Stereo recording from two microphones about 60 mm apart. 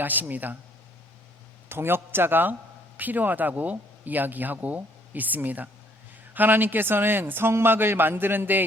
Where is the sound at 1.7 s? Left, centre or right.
Right.